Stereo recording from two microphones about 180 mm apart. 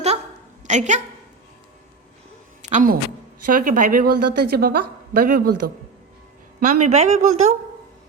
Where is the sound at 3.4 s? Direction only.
50° right (ahead or behind).